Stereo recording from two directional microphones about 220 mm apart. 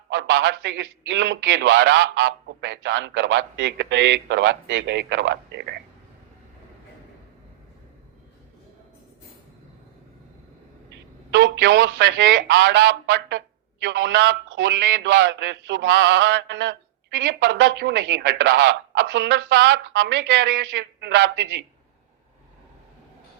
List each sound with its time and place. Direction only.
0.1 s a man's voice: 55° right (ahead or behind)
10.8 s a man's voice: 55° right (ahead or behind)